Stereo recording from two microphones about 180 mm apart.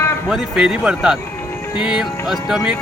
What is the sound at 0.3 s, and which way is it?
Speech, 5° right (ahead or behind).